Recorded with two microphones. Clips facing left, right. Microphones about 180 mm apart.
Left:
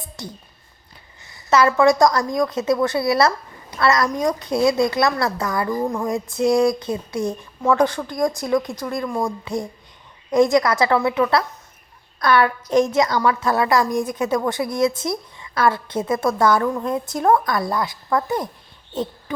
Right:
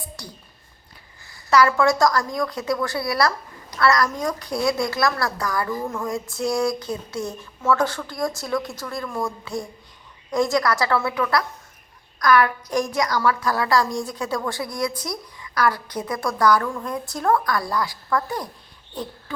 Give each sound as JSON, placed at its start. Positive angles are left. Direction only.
{"t": 0.2, "sound": "a woman's voice", "side_deg": 20}
{"t": 5.9, "sound": "female singing", "side_deg": 15}
{"t": 6.3, "sound": "a woman's voice", "side_deg": 20}